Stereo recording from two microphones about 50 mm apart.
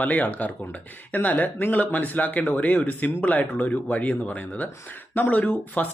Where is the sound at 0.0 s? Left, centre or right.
Left.